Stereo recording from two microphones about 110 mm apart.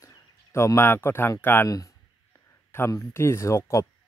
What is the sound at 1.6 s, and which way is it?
Speech, 30° left (ahead or behind).